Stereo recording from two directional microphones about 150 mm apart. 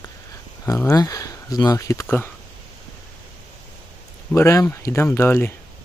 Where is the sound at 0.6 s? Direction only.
20° left (ahead or behind).